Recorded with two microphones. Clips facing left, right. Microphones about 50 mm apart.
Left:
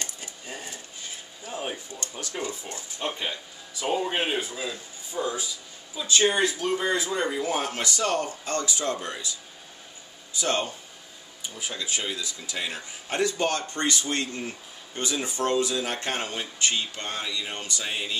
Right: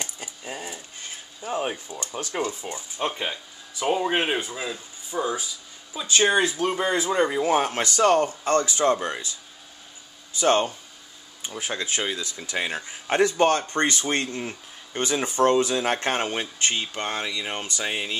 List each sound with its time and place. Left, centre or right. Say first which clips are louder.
0.0 s a sound: right 3 dB; centre
1.4 s a sound: right 6 dB; right
2.6 s speech: right 4 dB; right
5.9 s speech: right 2 dB; right
10.3 s speech: right 6 dB; right
11.4 s speech: right 4 dB; right